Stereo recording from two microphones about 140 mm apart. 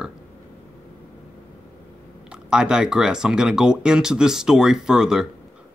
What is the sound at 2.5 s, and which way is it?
Speech, 5° right (ahead or behind).